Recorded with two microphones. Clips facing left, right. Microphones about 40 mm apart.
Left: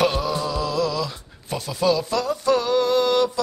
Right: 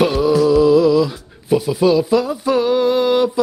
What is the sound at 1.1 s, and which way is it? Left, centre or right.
Speech, centre.